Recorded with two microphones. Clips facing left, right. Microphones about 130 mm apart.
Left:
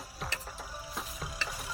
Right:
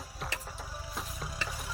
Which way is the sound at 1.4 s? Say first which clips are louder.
Right 1 dB; centre (ahead or behind).